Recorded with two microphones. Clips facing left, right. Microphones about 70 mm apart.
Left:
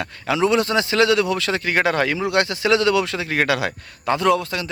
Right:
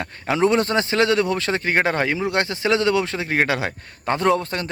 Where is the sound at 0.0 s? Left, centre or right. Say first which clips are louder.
Even; right.